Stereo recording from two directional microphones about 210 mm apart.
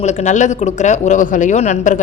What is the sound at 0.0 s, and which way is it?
Speech, 35° left (ahead or behind).